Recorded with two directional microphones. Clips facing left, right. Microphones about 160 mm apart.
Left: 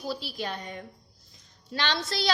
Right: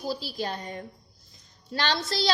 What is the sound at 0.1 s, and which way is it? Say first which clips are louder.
A woman's voice: right 2 dB; 35° right (ahead or behind).